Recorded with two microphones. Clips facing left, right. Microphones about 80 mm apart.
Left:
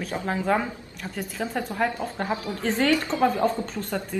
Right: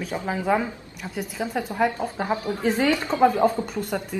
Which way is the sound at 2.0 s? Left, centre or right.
Centre.